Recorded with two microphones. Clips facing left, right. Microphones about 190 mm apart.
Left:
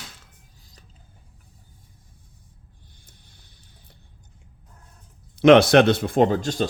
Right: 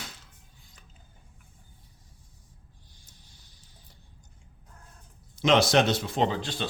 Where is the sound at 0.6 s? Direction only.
40° left (ahead or behind).